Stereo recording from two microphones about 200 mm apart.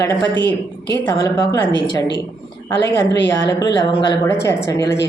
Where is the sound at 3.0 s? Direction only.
20° left (ahead or behind).